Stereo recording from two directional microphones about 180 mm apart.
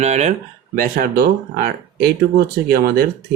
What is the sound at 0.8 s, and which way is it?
Speech, 55° right (ahead or behind).